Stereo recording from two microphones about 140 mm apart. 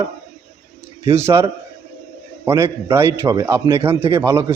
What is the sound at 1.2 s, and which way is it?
A man's voice, 20° right (ahead or behind).